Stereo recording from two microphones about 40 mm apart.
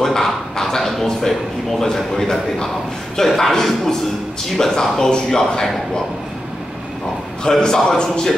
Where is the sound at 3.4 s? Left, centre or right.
Centre.